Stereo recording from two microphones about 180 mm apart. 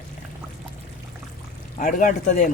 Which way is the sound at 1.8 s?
45° left (ahead or behind).